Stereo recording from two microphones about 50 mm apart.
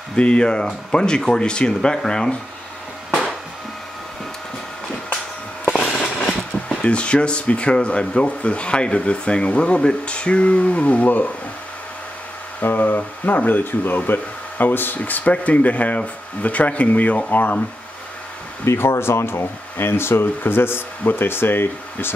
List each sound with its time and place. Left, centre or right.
0.1 s speech: centre
5.9 s speech: left
12.5 s speech: left
18.7 s speech: left